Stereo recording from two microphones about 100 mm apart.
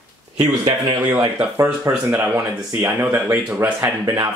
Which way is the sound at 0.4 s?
45° right (ahead or behind).